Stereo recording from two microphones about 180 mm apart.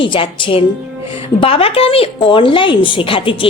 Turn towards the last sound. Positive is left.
turn(degrees=30)  # may be behind; listen again after turning